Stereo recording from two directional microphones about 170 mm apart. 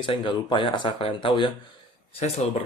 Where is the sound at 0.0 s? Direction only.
30° left (ahead or behind).